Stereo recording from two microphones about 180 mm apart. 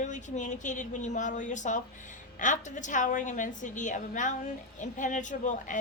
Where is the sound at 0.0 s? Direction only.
45° left (ahead or behind).